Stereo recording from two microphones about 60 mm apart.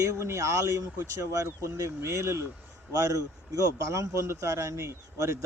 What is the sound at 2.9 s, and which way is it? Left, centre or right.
Speech, right.